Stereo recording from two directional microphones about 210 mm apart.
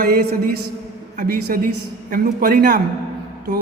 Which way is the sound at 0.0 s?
45° right (ahead or behind).